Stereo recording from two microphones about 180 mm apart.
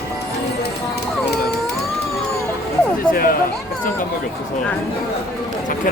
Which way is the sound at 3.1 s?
50° left (ahead or behind).